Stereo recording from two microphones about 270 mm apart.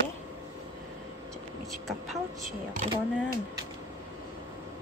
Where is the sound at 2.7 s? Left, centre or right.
Right.